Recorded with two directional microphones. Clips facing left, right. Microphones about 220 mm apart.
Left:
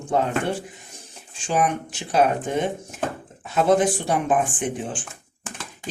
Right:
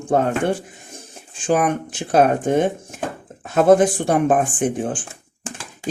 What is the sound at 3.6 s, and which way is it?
Speech, 50° right (ahead or behind).